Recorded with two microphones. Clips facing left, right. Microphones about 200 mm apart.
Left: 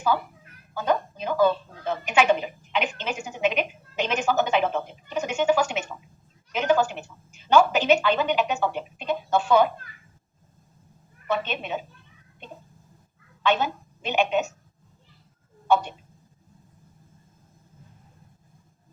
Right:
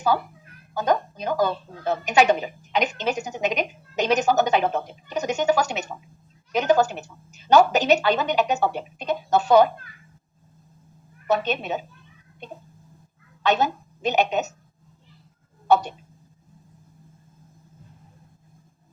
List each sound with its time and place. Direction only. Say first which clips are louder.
0.7 s a woman's voice: right 2 dB; 40° right (ahead or behind)
11.3 s a woman's voice: right 4 dB; 40° right (ahead or behind)
13.4 s a woman's voice: right 2 dB; 40° right (ahead or behind)
15.6 s speech: right 3 dB; 40° right (ahead or behind)